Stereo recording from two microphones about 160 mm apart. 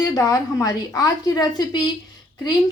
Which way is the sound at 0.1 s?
20° left (ahead or behind).